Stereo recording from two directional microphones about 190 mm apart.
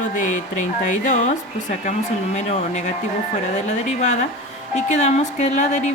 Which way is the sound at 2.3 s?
40° left (ahead or behind).